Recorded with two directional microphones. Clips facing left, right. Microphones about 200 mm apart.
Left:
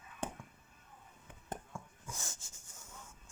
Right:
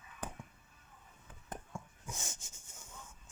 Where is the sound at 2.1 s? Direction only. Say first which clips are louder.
Right 1 dB; 20° right (ahead or behind).